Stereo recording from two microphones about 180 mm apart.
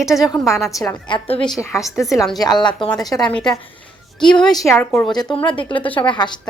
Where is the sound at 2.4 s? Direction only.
25° left (ahead or behind).